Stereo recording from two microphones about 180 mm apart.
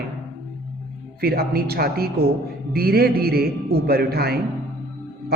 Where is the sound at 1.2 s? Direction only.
60° right (ahead or behind).